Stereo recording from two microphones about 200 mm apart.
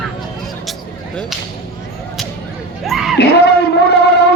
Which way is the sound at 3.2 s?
55° left (ahead or behind).